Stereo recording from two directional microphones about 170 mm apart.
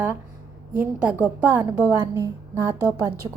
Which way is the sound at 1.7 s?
20° right (ahead or behind).